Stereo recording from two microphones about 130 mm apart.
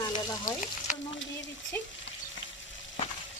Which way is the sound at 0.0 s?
30° left (ahead or behind).